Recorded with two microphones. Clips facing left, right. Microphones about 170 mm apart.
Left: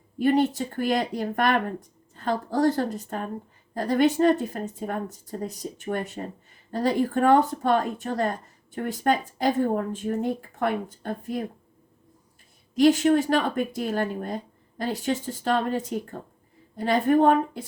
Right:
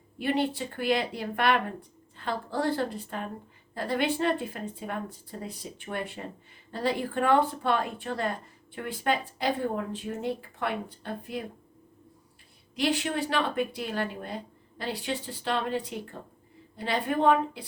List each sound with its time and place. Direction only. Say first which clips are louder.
0.2 s a woman's voice: left 6 dB; 45° left (ahead or behind)
12.7 s a woman's voice: left 10 dB; 45° left (ahead or behind)